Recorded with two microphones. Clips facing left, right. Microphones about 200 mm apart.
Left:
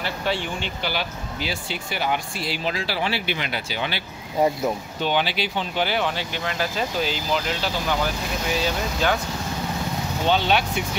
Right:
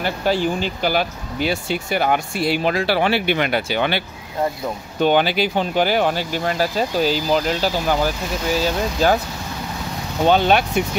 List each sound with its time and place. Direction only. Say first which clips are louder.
0.0 s speech: right 7 dB; 40° right (ahead or behind); by 4.0 s 60° right (ahead or behind)
5.0 s speech: right 7 dB; 50° right (ahead or behind)
10.2 s speech: right 6 dB; 50° right (ahead or behind)